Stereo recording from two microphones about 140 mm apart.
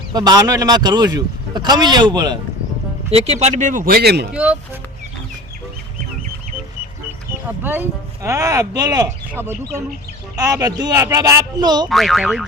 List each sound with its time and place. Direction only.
0.1 s speech: 30° right (ahead or behind)
3.1 s speech: 50° right (ahead or behind); by 4.0 s 80° right
4.3 s speech: 10° right (ahead or behind)
7.4 s speech: 15° right (ahead or behind); by 11.9 s 30° right (ahead or behind)
11.9 s boing: centre (ahead or behind)